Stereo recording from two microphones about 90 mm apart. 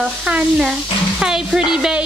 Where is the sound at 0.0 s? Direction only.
5° right (ahead or behind).